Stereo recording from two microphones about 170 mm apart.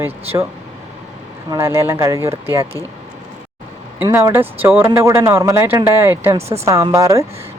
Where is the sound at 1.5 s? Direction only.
15° right (ahead or behind).